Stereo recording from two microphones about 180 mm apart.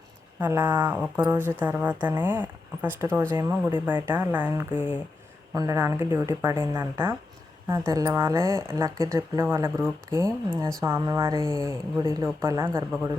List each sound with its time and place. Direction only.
0.3 s speech: 10° right (ahead or behind)